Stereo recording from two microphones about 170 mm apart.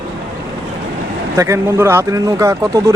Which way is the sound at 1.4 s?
15° right (ahead or behind).